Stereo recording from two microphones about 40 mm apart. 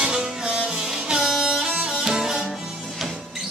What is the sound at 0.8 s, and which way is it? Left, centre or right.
Music, centre.